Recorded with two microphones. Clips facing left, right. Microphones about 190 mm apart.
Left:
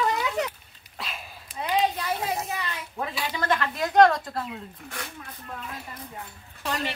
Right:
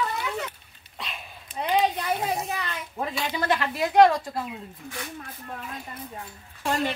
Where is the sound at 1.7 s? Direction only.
25° right (ahead or behind).